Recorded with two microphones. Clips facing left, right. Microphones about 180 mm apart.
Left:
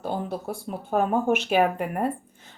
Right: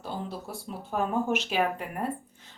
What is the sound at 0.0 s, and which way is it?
Speech, 55° left (ahead or behind).